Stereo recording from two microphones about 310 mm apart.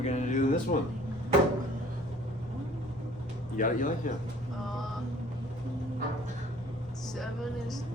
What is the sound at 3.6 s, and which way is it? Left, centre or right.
Speech, left.